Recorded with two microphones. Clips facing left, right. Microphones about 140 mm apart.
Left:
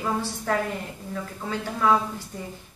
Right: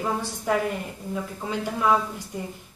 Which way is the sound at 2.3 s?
10° right (ahead or behind).